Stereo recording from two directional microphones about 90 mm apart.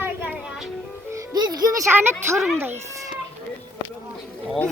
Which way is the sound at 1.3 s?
50° right (ahead or behind).